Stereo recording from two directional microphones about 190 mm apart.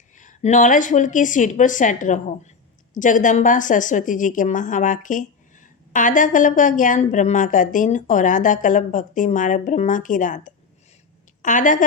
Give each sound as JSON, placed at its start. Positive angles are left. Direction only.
{"t": 0.2, "sound": "a woman's voice", "side_deg": 40}